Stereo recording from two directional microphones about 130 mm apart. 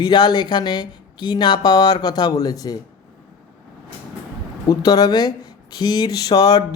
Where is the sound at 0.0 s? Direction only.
35° left (ahead or behind).